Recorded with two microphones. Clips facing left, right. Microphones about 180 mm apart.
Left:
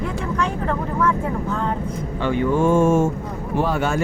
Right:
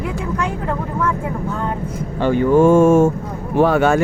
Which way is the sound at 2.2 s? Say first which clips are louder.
Right 6 dB; 40° right (ahead or behind).